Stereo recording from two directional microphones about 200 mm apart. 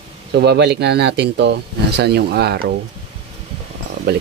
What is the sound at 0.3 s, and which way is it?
Speech, 55° right (ahead or behind).